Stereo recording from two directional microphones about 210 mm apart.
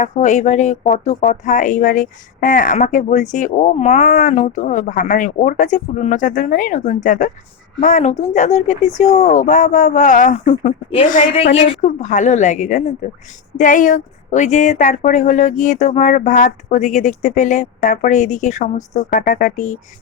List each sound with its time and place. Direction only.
0.0 s speech: 35° left (ahead or behind)